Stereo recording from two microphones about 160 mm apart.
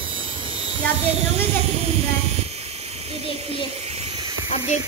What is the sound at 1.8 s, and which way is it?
Speech, 40° right (ahead or behind).